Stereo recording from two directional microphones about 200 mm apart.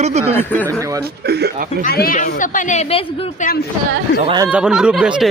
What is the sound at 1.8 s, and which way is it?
A woman's voice, 45° left (ahead or behind).